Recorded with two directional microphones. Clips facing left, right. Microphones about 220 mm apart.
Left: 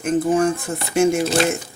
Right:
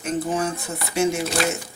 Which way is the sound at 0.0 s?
50° left (ahead or behind).